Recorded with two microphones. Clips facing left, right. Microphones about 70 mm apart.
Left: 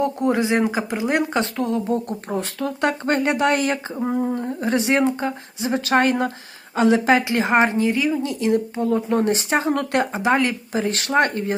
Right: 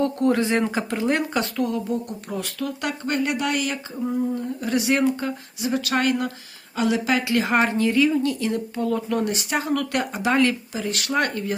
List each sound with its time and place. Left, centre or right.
0.0 s a woman's voice: centre
1.9 s a woman's voice: left
4.0 s a woman's voice: left
10.7 s a woman's voice: left